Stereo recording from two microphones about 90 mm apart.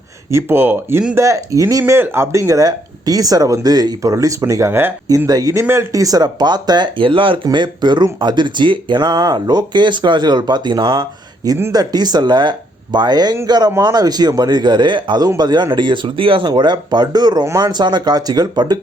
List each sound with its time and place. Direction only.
0.3 s speech: 30° right (ahead or behind); by 4.1 s 50° right (ahead or behind)
4.1 s speech: 40° right (ahead or behind)
4.7 s speech: 25° right (ahead or behind)
5.0 s speech: 40° right (ahead or behind)
5.5 s speech: 30° right (ahead or behind); by 7.3 s 70° right (ahead or behind)
7.5 s speech: 55° right (ahead or behind)
11.7 s speech: 45° right (ahead or behind); by 16.5 s 85° right
16.5 s speech: 55° right (ahead or behind)